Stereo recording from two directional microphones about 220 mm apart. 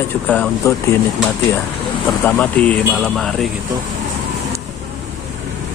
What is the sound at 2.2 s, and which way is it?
Speech, 5° left (ahead or behind).